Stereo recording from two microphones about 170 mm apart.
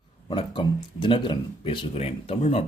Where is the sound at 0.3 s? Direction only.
30° left (ahead or behind).